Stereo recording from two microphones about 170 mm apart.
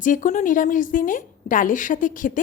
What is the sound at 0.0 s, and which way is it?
Speech, 50° left (ahead or behind).